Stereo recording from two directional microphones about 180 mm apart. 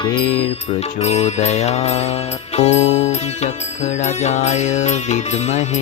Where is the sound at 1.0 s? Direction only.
35° left (ahead or behind).